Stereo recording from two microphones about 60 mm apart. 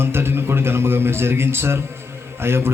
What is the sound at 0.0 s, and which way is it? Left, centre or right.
A man's voice, right.